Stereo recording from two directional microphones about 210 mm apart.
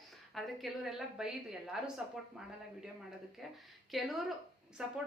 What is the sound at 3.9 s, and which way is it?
A woman's voice, centre (ahead or behind).